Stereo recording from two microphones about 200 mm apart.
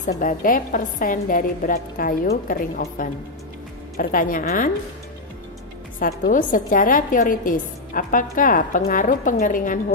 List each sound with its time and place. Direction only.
0.0 s a woman's voice: 40° left (ahead or behind)
5.9 s a woman's voice: 45° left (ahead or behind)